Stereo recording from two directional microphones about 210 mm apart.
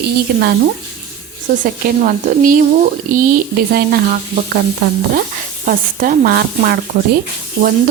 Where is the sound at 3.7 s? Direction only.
45° right (ahead or behind).